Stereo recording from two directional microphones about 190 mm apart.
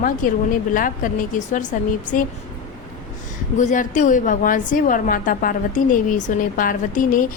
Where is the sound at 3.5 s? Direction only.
40° left (ahead or behind).